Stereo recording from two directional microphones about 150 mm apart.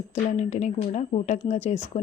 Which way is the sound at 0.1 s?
50° left (ahead or behind).